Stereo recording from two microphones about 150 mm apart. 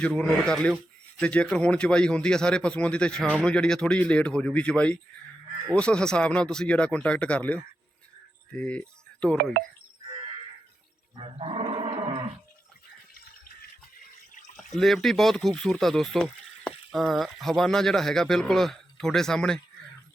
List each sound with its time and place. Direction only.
0.0 s a man's voice: 5° left (ahead or behind)
9.4 s speech: 90° right
11.2 s roar: 40° right (ahead or behind)
14.5 s speech: centre (ahead or behind)